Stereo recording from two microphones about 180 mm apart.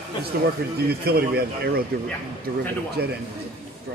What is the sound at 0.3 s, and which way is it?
Speech, 60° right (ahead or behind).